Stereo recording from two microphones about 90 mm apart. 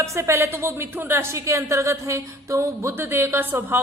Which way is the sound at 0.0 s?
35° right (ahead or behind).